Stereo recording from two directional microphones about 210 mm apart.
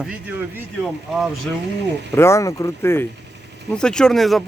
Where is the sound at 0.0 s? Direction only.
5° right (ahead or behind).